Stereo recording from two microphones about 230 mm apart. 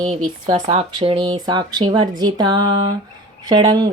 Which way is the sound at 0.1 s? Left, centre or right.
Right.